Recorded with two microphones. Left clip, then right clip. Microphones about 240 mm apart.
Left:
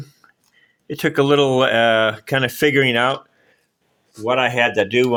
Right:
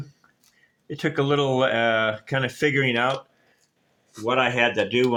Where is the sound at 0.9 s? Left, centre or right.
Left.